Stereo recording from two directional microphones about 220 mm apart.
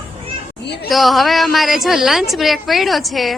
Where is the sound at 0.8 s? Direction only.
Centre (ahead or behind).